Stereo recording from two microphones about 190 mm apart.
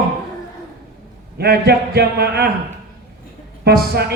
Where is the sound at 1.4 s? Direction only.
55° right (ahead or behind).